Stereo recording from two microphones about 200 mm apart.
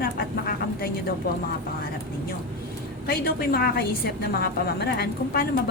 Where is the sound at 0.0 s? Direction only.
50° left (ahead or behind).